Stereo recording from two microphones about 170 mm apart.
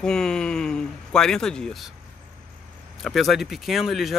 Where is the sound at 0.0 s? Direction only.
5° left (ahead or behind).